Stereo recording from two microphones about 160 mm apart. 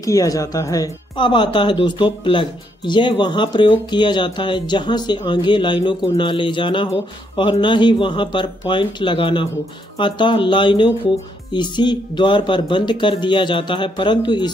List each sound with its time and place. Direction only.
0.0 s speech: 20° left (ahead or behind)